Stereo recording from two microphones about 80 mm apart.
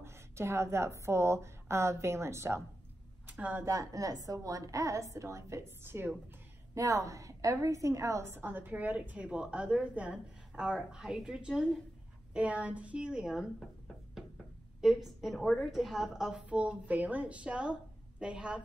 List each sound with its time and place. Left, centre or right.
0.0 s a sound: right
1.0 s a woman's voice: right
3.3 s a woman's voice: right
3.6 s a woman's voice: right
6.7 s a woman's voice: right
8.4 s a woman's voice: right; by 13.5 s centre
14.8 s a woman's voice: centre